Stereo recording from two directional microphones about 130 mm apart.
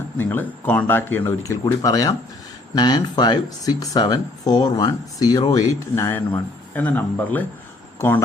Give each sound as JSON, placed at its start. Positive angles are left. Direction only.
{"t": 0.2, "sound": "speech", "side_deg": 15}